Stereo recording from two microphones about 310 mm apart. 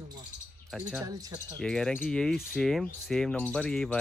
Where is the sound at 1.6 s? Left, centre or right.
Centre.